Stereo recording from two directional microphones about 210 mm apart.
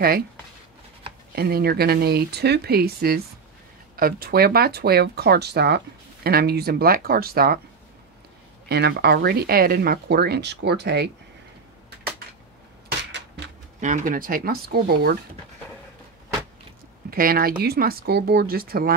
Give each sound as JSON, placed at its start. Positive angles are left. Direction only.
{"t": 1.3, "sound": "speech", "side_deg": -45}
{"t": 8.6, "sound": "speech", "side_deg": -50}
{"t": 13.7, "sound": "speech", "side_deg": -35}
{"t": 17.1, "sound": "speech", "side_deg": -45}